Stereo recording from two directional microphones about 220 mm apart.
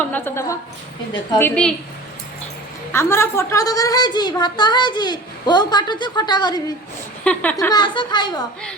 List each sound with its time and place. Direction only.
0.1 s a woman's voice: 10° left (ahead or behind)
2.9 s a woman's voice: 10° left (ahead or behind)